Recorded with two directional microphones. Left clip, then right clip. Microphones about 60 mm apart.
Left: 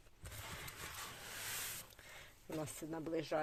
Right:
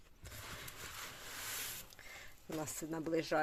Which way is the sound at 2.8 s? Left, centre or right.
Right.